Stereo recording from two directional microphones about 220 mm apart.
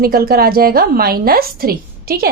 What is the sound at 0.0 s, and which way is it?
A woman's voice, 45° right (ahead or behind).